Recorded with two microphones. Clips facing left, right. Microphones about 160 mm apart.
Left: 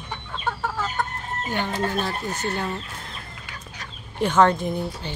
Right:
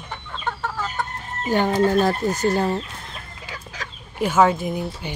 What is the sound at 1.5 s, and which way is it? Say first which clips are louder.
Speech: right 8 dB; 45° right (ahead or behind).